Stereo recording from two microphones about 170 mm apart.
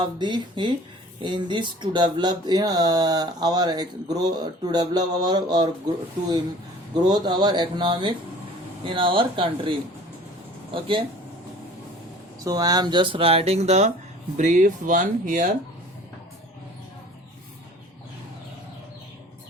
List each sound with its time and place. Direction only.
0.0 s speech: 25° right (ahead or behind)
7.0 s speech: 25° right (ahead or behind)
10.8 s speech: 30° right (ahead or behind)
12.4 s speech: 20° right (ahead or behind); by 15.4 s 50° right (ahead or behind)